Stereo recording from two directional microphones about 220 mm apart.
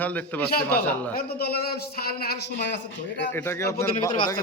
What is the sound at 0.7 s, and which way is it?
Speech, 45° left (ahead or behind).